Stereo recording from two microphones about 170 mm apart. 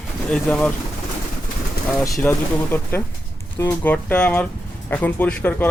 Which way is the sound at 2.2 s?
10° left (ahead or behind).